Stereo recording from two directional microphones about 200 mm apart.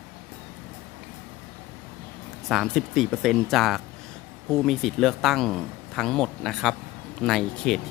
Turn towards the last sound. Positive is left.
turn(degrees=0)  # may be behind; listen again after turning